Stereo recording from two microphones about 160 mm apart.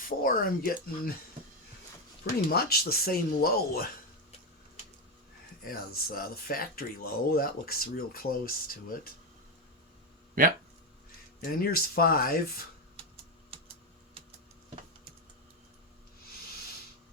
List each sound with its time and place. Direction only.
0.0 s speech: 60° left (ahead or behind)
2.5 s speech: 70° left (ahead or behind)
5.6 s speech: 70° left (ahead or behind)
11.3 s speech: 70° left (ahead or behind)